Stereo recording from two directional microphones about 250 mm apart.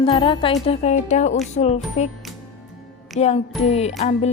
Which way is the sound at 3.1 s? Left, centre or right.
Left.